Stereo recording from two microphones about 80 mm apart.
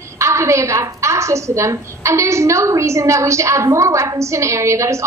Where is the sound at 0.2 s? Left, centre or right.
Right.